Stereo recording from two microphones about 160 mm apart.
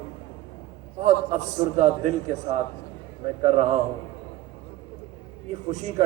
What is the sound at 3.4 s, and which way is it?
Speech, 45° right (ahead or behind).